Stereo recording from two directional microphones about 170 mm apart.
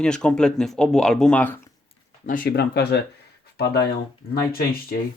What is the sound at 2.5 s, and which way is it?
Speech, 75° left (ahead or behind).